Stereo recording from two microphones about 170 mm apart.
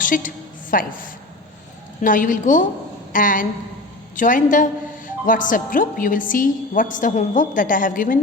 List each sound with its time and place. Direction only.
0.0 s a woman's voice: 50° left (ahead or behind)